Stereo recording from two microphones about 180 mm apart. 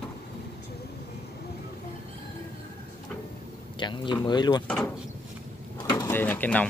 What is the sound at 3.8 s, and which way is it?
Speech, 25° left (ahead or behind).